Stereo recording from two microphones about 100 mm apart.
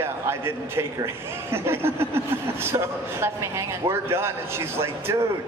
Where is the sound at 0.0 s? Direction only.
25° right (ahead or behind).